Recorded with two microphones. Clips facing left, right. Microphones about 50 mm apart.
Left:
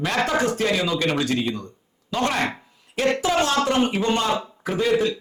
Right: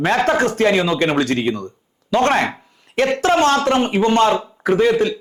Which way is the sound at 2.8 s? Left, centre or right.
Right.